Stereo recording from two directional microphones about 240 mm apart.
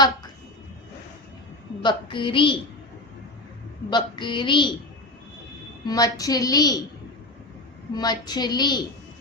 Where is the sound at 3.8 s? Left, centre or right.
Centre.